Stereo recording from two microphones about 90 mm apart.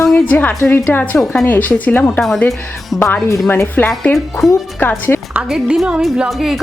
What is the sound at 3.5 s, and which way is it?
Speech, 20° left (ahead or behind).